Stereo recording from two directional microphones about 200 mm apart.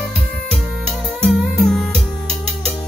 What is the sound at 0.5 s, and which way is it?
Music, centre (ahead or behind).